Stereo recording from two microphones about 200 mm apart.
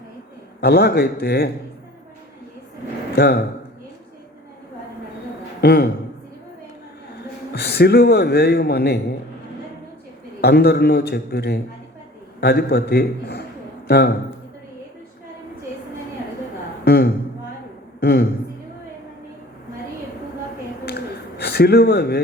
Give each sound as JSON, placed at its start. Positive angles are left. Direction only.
{"t": 0.6, "sound": "a man's voice", "side_deg": 55}
{"t": 3.2, "sound": "a man's voice", "side_deg": 50}
{"t": 5.5, "sound": "a man's voice", "side_deg": 55}
{"t": 7.5, "sound": "a man's voice", "side_deg": 55}
{"t": 10.4, "sound": "a man's voice", "side_deg": 55}
{"t": 16.8, "sound": "a man's voice", "side_deg": 55}
{"t": 20.8, "sound": "a sound", "side_deg": 55}